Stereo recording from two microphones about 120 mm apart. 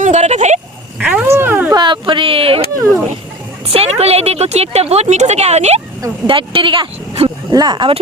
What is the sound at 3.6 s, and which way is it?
Speech, 55° right (ahead or behind).